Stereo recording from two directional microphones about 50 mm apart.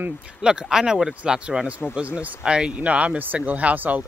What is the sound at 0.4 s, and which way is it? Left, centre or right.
Speech, centre.